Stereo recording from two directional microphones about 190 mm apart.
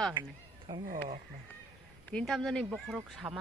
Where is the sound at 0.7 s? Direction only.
20° right (ahead or behind).